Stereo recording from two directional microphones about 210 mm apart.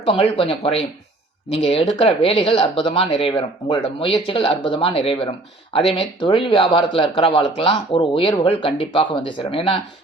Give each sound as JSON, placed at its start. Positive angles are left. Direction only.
{"t": 0.0, "sound": "speech", "side_deg": 25}